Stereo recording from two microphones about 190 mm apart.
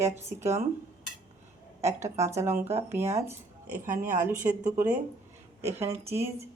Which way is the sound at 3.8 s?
45° right (ahead or behind).